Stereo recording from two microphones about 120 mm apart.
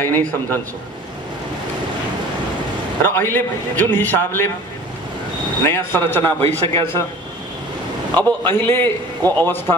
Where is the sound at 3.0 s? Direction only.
15° left (ahead or behind).